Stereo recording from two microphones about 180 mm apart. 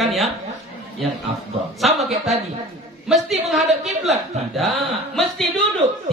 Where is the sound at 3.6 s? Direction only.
40° right (ahead or behind).